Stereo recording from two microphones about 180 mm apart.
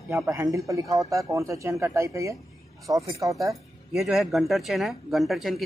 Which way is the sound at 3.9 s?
Centre (ahead or behind).